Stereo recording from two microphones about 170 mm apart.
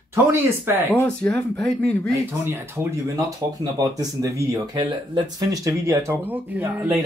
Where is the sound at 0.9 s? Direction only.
10° left (ahead or behind).